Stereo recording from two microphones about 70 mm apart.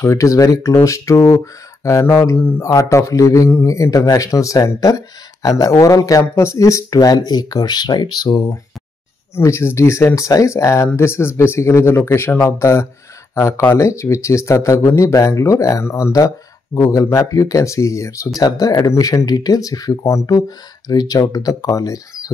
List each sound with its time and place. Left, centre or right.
0.0 s speech: left
6.3 s speech: left
9.3 s speech: left
18.4 s speech: left